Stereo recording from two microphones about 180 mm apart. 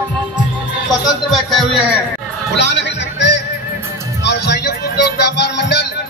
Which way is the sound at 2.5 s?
75° left (ahead or behind).